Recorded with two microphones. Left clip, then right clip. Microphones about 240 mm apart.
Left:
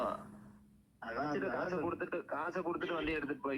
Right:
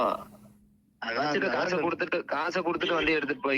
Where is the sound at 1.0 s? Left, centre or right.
Right.